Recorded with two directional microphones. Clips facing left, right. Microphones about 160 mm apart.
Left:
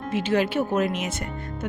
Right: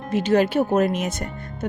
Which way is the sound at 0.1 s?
40° right (ahead or behind).